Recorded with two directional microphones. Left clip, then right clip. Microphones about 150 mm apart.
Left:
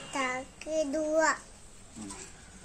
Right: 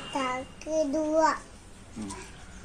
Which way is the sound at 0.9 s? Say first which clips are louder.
Right 3 dB; 40° left (ahead or behind).